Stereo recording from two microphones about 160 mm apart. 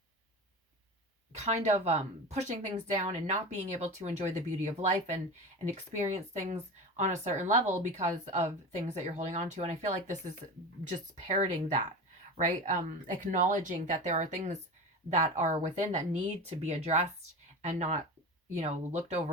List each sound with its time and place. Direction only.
1.4 s a woman's voice: 45° right (ahead or behind)